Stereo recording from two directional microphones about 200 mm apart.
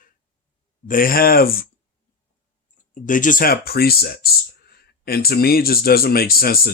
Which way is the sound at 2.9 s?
40° left (ahead or behind).